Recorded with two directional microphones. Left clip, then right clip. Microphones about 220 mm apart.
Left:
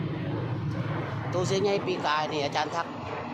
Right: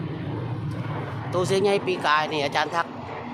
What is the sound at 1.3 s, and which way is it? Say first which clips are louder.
Speech: right 5 dB; 35° right (ahead or behind).